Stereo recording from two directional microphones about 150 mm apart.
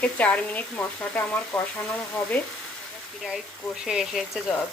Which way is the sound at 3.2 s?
5° right (ahead or behind).